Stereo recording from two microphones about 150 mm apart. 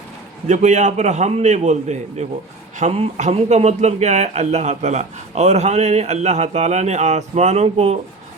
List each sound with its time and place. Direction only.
0.4 s speech: 50° right (ahead or behind)